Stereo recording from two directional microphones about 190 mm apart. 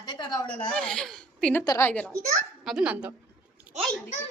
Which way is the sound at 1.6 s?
20° left (ahead or behind).